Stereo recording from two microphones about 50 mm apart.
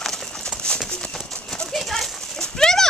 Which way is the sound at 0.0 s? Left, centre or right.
Centre.